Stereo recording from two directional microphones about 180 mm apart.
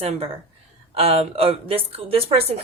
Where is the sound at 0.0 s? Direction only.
35° right (ahead or behind).